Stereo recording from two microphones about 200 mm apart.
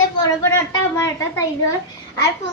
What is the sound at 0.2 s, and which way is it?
A child's voice, 15° left (ahead or behind).